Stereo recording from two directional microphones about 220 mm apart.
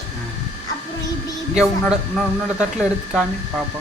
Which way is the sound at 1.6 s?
5° right (ahead or behind).